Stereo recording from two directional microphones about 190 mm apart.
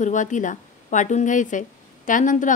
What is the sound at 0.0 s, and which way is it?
A woman's voice, 40° left (ahead or behind).